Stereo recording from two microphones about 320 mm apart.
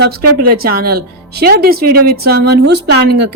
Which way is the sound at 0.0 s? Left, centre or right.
Right.